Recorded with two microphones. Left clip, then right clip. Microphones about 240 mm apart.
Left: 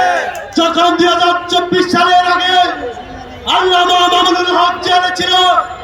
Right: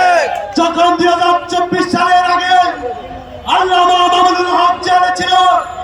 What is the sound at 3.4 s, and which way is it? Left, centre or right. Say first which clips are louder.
Music: even; left.